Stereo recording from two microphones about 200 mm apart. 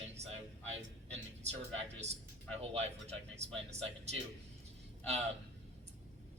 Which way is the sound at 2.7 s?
30° right (ahead or behind).